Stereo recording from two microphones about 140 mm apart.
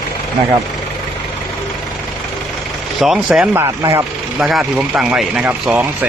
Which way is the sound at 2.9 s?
5° right (ahead or behind).